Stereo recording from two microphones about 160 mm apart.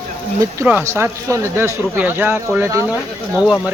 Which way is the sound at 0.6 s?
15° right (ahead or behind).